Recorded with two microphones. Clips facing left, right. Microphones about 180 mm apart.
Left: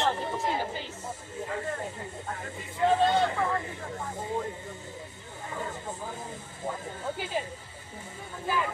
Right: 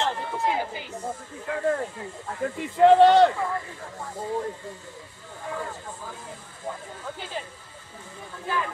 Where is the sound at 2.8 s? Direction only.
70° right (ahead or behind).